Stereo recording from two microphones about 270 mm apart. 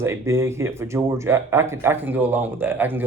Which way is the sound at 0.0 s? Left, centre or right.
Centre.